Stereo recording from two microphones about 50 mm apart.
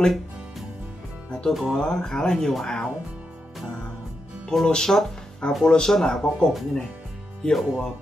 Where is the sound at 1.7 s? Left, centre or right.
Centre.